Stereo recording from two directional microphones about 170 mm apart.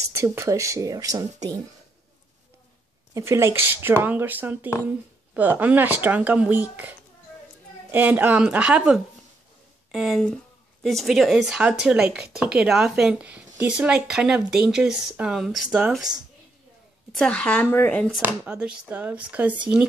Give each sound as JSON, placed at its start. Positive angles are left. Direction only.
{"t": 0.1, "sound": "speech", "side_deg": -15}
{"t": 3.2, "sound": "speech", "side_deg": -15}
{"t": 17.1, "sound": "speech", "side_deg": 5}
{"t": 18.2, "sound": "speech", "side_deg": -10}